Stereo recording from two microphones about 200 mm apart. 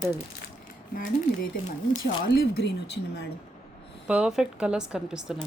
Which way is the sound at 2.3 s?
50° left (ahead or behind).